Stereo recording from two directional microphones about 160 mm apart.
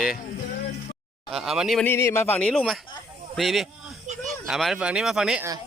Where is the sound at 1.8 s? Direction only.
15° left (ahead or behind).